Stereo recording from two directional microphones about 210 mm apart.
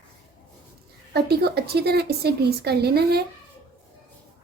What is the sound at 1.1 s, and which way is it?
A woman's voice, 50° right (ahead or behind).